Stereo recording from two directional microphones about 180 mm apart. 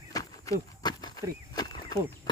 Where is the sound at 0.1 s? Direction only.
20° left (ahead or behind).